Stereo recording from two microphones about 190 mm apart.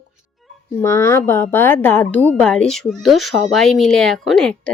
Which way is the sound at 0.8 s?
15° left (ahead or behind).